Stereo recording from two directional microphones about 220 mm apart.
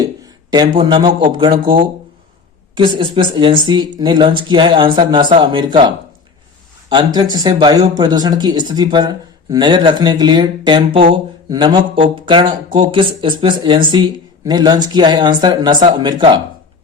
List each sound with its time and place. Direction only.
0.0 s a sound: 20° right (ahead or behind)
0.8 s speech: 20° right (ahead or behind)
2.7 s speech: 20° right (ahead or behind)
6.9 s speech: 20° right (ahead or behind)